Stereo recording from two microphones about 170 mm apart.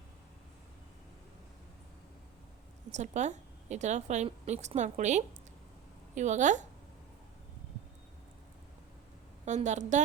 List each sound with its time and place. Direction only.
2.9 s a woman's voice: 45° right (ahead or behind)
9.5 s a woman's voice: 45° right (ahead or behind)